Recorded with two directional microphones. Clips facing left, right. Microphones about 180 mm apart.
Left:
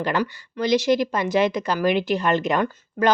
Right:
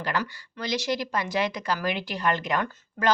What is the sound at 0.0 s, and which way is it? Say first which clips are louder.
Speech: left 6 dB; 20° left (ahead or behind).